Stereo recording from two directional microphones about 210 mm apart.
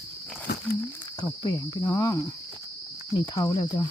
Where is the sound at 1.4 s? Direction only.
20° left (ahead or behind).